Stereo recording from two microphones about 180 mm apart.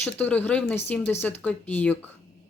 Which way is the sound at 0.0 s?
10° left (ahead or behind).